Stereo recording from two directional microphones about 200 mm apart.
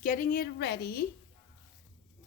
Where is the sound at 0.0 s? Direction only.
45° left (ahead or behind).